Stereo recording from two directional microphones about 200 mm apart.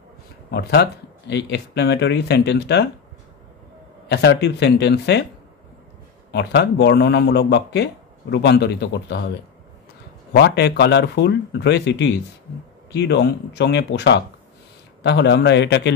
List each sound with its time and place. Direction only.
0.5 s speech: 50° left (ahead or behind)
4.1 s speech: 60° left (ahead or behind)
6.3 s speech: 60° left (ahead or behind)
10.3 s speech: 55° left (ahead or behind)